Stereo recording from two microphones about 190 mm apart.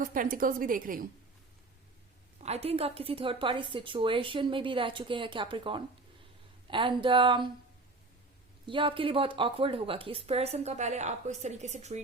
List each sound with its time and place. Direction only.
0.0 s a woman's voice: 45° right (ahead or behind)
2.4 s a woman's voice: 35° right (ahead or behind)
8.6 s a woman's voice: 25° right (ahead or behind)